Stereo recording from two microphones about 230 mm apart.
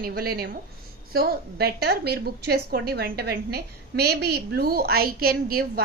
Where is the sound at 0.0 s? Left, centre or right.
Right.